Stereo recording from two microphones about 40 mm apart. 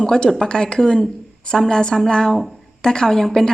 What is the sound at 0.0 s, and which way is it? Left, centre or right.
A woman's voice, centre.